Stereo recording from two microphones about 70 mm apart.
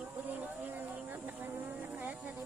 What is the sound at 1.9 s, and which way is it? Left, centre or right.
Music, right.